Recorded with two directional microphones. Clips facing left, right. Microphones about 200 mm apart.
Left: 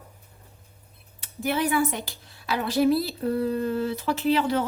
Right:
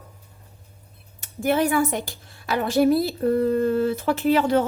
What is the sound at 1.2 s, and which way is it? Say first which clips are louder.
A woman's voice: right 5 dB; 45° right (ahead or behind).